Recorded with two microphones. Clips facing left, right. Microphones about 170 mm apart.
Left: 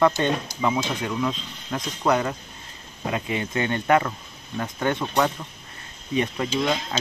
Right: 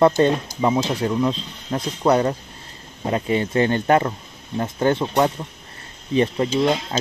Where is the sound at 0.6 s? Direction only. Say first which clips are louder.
Right 5 dB; 35° right (ahead or behind).